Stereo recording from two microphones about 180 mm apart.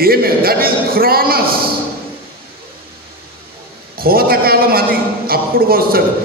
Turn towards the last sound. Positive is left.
turn(degrees=-55)  # may be behind; listen again after turning